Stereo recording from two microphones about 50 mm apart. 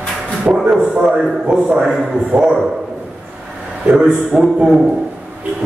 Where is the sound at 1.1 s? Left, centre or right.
Right.